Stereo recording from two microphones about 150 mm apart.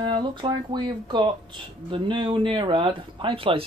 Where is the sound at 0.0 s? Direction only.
30° right (ahead or behind).